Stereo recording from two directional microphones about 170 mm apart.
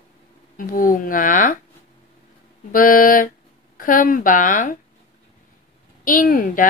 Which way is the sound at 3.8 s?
55° left (ahead or behind).